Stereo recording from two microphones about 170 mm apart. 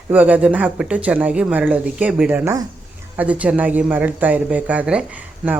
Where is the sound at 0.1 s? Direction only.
10° right (ahead or behind).